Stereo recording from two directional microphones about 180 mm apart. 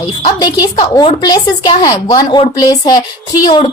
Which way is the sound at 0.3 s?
20° left (ahead or behind).